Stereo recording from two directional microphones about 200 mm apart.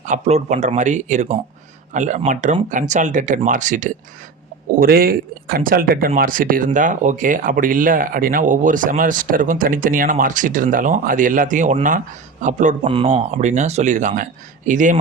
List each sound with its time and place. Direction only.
0.0 s speech: 35° right (ahead or behind)